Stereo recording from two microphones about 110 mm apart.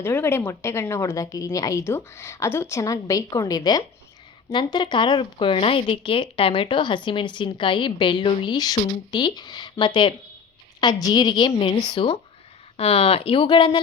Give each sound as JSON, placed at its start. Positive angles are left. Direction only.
{"t": 0.0, "sound": "a woman's voice", "side_deg": 20}
{"t": 11.5, "sound": "speech", "side_deg": 55}
{"t": 12.7, "sound": "speech", "side_deg": 60}